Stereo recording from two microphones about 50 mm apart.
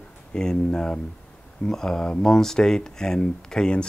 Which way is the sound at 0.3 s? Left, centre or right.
Centre.